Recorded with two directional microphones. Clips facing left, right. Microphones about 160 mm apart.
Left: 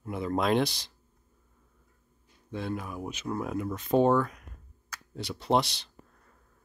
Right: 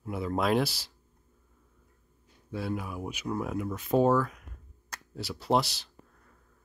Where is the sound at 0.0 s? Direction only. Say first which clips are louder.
Left 1 dB; 5° right (ahead or behind).